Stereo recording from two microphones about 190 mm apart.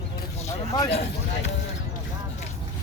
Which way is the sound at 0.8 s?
30° left (ahead or behind).